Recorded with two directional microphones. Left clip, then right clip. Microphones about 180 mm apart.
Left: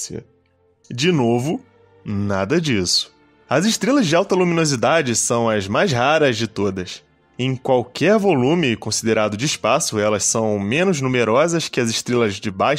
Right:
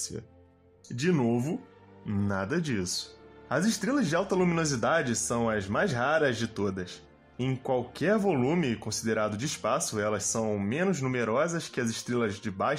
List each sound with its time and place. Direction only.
0.9 s speech: 45° left (ahead or behind)
2.0 s speech: 35° left (ahead or behind)